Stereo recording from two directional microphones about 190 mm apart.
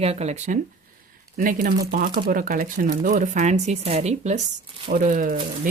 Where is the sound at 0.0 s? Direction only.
35° right (ahead or behind).